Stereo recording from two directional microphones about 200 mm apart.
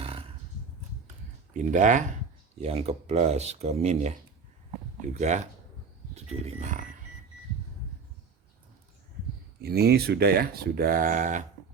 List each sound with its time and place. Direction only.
0.0 s a sound: 30° right (ahead or behind)
1.5 s speech: 40° right (ahead or behind)
9.6 s speech: 50° right (ahead or behind)